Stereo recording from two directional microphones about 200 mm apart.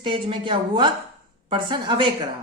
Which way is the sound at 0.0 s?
25° right (ahead or behind).